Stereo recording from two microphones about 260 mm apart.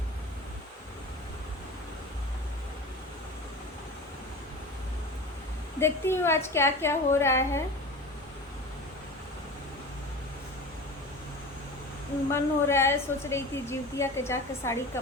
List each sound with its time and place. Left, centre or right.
5.8 s a woman's voice: centre
12.3 s a woman's voice: centre